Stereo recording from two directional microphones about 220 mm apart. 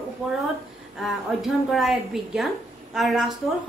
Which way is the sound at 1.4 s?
Centre (ahead or behind).